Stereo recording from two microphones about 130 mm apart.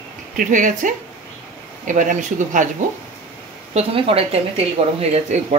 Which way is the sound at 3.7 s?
50° right (ahead or behind).